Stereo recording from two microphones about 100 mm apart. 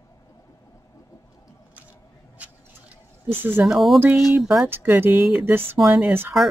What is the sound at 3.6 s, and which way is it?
Speech, centre (ahead or behind).